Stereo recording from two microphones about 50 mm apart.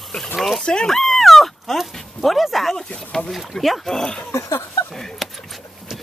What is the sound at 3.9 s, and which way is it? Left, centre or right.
Speech, centre.